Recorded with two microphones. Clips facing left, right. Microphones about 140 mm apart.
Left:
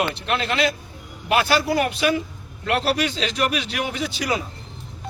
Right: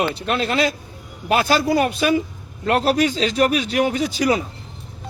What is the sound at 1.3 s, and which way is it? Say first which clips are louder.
A man's voice: right 2 dB; 40° right (ahead or behind).